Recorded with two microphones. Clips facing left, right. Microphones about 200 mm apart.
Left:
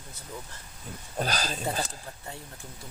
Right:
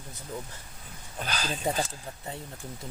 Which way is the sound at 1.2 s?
40° left (ahead or behind).